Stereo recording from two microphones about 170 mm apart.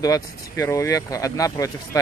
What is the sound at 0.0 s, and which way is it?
Speech, 20° left (ahead or behind).